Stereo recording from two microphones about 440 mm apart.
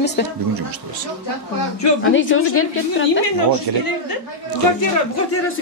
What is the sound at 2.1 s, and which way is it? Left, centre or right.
Speech, left.